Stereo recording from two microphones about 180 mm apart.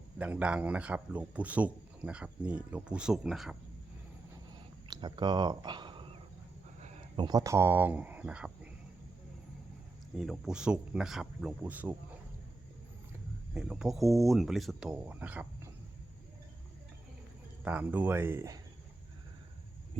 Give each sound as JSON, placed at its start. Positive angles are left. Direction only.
{"t": 0.2, "sound": "a man's voice", "side_deg": -5}
{"t": 4.9, "sound": "a sound", "side_deg": -25}
{"t": 7.2, "sound": "a man's voice", "side_deg": -20}
{"t": 10.2, "sound": "speech", "side_deg": 0}
{"t": 13.5, "sound": "speech", "side_deg": -5}
{"t": 17.6, "sound": "a man's voice", "side_deg": -5}